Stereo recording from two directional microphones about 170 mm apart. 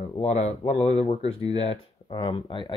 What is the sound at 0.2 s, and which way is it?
Speech, 40° left (ahead or behind).